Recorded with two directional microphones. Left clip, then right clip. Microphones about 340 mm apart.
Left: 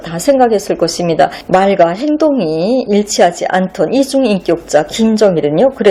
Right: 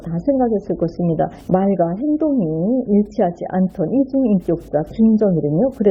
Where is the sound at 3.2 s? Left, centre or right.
Centre.